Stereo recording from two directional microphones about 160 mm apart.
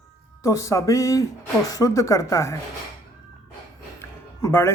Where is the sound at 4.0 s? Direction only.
15° left (ahead or behind).